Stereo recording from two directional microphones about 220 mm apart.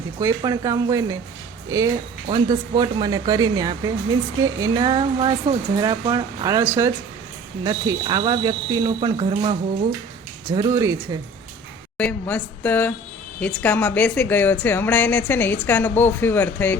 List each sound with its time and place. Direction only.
0.2 s speech: 15° right (ahead or behind)
2.2 s speech: 20° right (ahead or behind)
10.5 s speech: 15° right (ahead or behind)
11.9 s a woman's voice: 5° left (ahead or behind)